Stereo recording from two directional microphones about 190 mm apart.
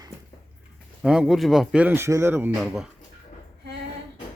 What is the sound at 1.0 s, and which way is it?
Speech, 5° right (ahead or behind).